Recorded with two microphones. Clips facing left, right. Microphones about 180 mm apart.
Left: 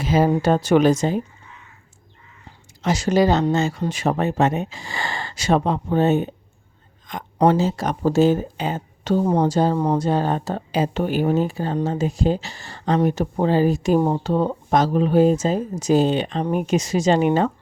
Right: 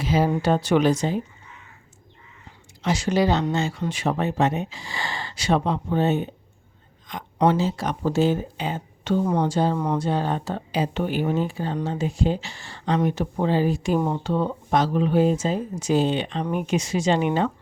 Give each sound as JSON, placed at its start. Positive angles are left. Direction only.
{"t": 0.0, "sound": "speech", "side_deg": 45}
{"t": 2.8, "sound": "speech", "side_deg": 40}
{"t": 7.3, "sound": "speech", "side_deg": 40}